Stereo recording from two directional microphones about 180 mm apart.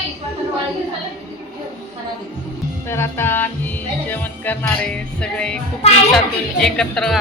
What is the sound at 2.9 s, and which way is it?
Music, 15° left (ahead or behind).